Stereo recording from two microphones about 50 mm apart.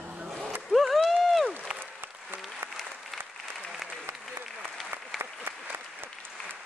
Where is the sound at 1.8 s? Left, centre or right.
Right.